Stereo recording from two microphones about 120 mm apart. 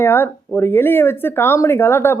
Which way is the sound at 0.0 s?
20° left (ahead or behind).